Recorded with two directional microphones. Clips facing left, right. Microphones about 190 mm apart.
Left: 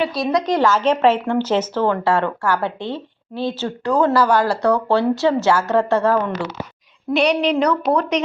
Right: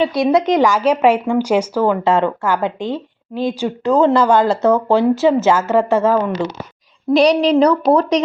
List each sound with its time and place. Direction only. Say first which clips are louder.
0.0 s speech: right 5 dB; 20° right (ahead or behind)
7.1 s a woman's voice: right 5 dB; 35° right (ahead or behind)